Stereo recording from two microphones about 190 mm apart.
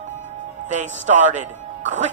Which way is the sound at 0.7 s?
40° right (ahead or behind).